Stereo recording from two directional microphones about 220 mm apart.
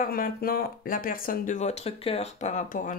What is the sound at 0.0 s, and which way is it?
Speech, 40° left (ahead or behind).